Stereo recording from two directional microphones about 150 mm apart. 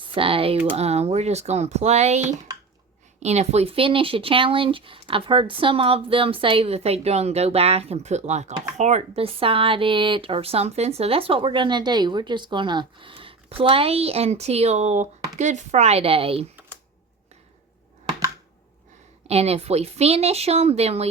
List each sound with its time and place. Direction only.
0.0 s speech: 35° right (ahead or behind)
19.3 s speech: 45° right (ahead or behind)